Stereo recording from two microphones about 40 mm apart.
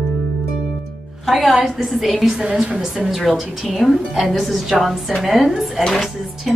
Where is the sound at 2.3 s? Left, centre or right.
Right.